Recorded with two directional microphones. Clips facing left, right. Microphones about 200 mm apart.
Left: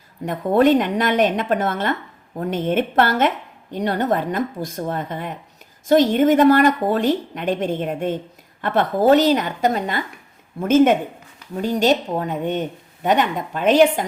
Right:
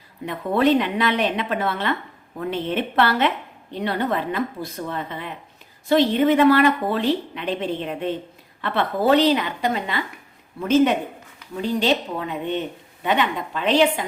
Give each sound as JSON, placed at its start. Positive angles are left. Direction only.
{"t": 0.3, "sound": "a woman's voice", "side_deg": 45}